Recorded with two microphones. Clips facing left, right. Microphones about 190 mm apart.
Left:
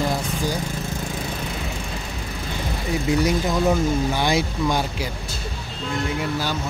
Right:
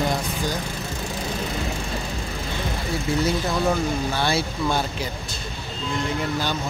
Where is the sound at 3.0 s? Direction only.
15° left (ahead or behind).